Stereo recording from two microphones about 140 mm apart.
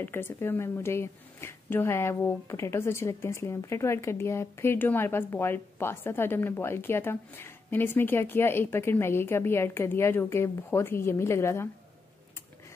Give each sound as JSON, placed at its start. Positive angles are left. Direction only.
{"t": 0.0, "sound": "a woman's voice", "side_deg": 15}